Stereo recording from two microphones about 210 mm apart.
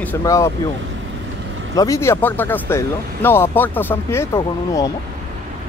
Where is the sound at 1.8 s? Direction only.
15° left (ahead or behind).